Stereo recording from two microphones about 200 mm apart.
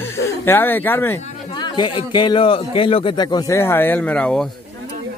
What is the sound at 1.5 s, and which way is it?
A man's voice, 20° left (ahead or behind).